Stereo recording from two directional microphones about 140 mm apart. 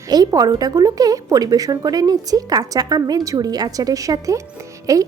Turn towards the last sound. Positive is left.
turn(degrees=-25)  # may be behind; listen again after turning